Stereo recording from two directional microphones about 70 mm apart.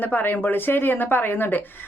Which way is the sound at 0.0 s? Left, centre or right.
Left.